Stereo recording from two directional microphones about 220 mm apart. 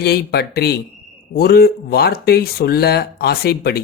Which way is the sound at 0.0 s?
45° left (ahead or behind).